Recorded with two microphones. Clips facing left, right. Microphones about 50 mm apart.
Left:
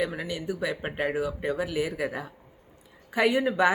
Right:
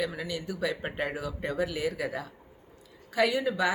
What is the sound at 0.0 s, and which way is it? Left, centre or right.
Speech, left.